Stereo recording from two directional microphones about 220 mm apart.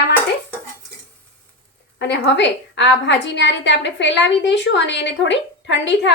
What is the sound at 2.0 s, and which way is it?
A woman's voice, 50° left (ahead or behind).